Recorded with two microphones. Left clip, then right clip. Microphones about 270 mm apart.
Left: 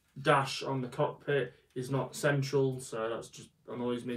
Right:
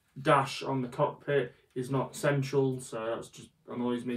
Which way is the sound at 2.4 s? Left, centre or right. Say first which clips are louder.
Right 1 dB; centre.